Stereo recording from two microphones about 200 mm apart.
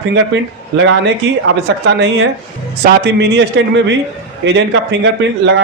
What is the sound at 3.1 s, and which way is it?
A man's voice, 55° right (ahead or behind).